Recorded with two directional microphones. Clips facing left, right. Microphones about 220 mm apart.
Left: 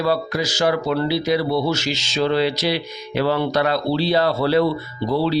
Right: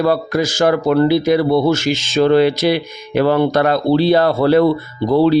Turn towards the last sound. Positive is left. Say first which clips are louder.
# right 7 dB
turn(degrees=-50)  # may be behind; listen again after turning